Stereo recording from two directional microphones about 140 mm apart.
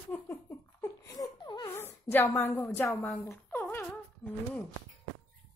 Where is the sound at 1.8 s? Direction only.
15° left (ahead or behind).